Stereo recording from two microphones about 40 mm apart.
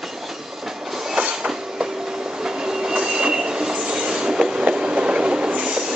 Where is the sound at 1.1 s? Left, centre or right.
Right.